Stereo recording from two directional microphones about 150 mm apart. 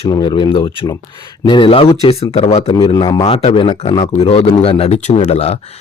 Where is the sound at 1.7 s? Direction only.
40° left (ahead or behind).